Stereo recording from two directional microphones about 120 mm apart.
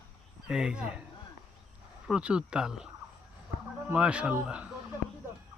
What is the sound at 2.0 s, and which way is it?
Speech, 10° right (ahead or behind).